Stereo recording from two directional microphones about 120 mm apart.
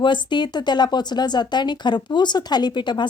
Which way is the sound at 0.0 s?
40° left (ahead or behind).